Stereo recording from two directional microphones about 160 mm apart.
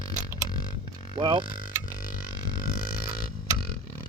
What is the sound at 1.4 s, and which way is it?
Speech, 60° left (ahead or behind).